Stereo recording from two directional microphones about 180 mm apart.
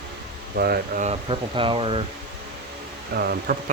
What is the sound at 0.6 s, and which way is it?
Speech, 60° right (ahead or behind).